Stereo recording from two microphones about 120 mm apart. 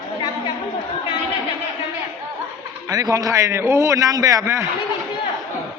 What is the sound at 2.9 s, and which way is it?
A man's voice, 30° right (ahead or behind).